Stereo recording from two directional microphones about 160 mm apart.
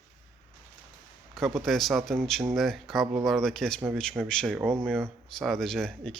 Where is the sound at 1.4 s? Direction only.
Centre (ahead or behind).